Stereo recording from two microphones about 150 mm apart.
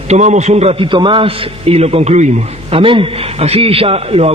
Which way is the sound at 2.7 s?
35° right (ahead or behind).